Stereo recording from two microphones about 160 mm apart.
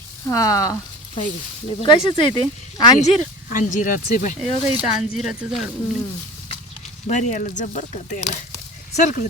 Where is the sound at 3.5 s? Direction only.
55° left (ahead or behind).